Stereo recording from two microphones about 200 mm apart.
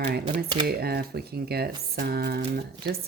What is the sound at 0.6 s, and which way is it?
Speech, 50° right (ahead or behind).